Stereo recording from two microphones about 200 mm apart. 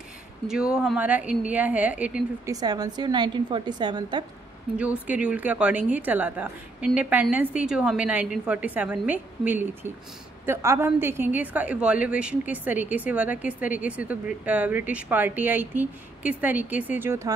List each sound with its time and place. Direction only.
0.5 s a woman's voice: 5° right (ahead or behind)
2.5 s a woman's voice: 20° right (ahead or behind)
4.7 s a woman's voice: 5° right (ahead or behind)